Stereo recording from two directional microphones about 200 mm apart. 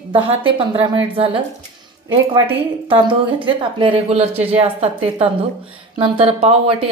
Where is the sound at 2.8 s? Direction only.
25° right (ahead or behind).